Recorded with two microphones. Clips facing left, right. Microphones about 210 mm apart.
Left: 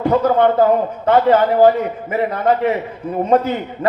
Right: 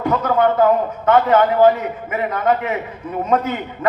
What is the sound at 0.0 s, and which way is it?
A man's voice, 30° left (ahead or behind).